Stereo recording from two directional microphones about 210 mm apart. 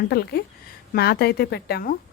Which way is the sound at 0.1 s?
50° left (ahead or behind).